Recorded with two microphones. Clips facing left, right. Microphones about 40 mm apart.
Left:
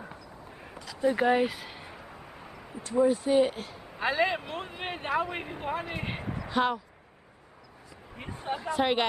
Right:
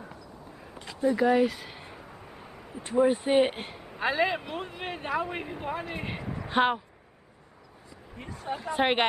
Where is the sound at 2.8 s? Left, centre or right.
Right.